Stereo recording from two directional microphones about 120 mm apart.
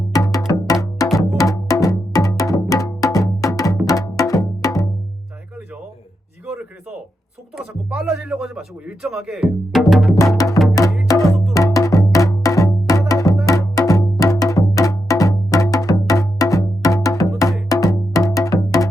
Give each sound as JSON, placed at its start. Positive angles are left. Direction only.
{"t": 0.1, "sound": "wood block", "side_deg": 30}
{"t": 0.5, "sound": "music", "side_deg": 30}
{"t": 7.5, "sound": "speech", "side_deg": -5}
{"t": 10.3, "sound": "music", "side_deg": 25}